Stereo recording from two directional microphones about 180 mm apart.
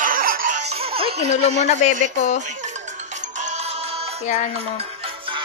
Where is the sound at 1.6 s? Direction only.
40° left (ahead or behind).